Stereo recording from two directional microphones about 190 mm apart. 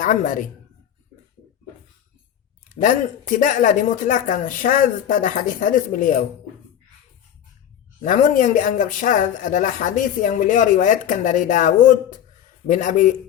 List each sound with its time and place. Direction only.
0.0 s speech: 45° left (ahead or behind)
2.8 s speech: 45° left (ahead or behind)
8.0 s speech: 45° left (ahead or behind)